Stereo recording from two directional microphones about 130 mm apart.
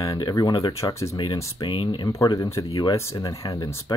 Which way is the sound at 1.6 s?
40° left (ahead or behind).